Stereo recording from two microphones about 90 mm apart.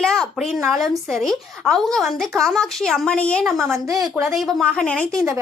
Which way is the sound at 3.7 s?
40° right (ahead or behind).